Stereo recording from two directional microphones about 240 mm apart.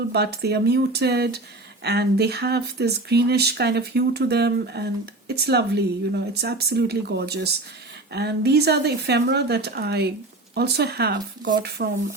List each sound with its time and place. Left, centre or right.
0.1 s speech: right